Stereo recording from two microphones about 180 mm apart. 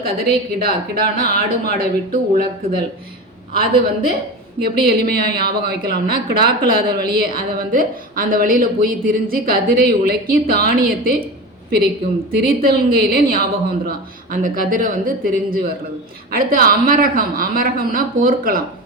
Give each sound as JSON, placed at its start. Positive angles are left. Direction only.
{"t": 0.0, "sound": "a woman's voice", "side_deg": -55}
{"t": 12.3, "sound": "a woman's voice", "side_deg": -55}